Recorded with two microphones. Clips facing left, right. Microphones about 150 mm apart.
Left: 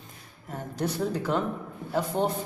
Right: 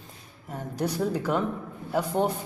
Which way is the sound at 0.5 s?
5° right (ahead or behind).